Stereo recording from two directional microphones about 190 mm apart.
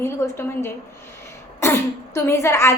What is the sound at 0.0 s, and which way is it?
A woman's voice, 10° left (ahead or behind).